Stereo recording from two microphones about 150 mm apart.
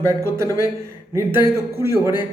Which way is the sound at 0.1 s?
20° right (ahead or behind).